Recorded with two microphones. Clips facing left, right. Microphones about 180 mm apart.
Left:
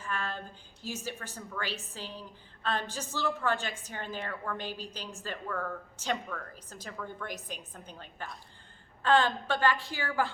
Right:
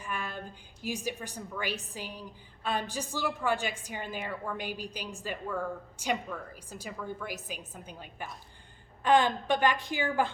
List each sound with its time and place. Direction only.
0.0 s a woman's voice: 15° right (ahead or behind)